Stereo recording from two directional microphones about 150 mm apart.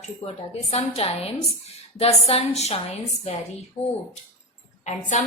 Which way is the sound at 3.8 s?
15° left (ahead or behind).